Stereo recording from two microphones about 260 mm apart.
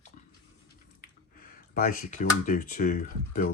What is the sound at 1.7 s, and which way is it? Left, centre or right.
Speech, left.